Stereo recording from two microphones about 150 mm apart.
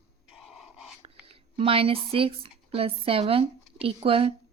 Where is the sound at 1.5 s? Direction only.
40° right (ahead or behind).